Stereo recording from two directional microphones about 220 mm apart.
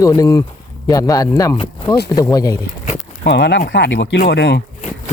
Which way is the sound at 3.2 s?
50° left (ahead or behind).